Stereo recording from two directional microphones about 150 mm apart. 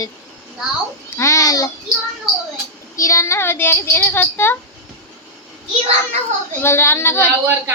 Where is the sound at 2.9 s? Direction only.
20° left (ahead or behind).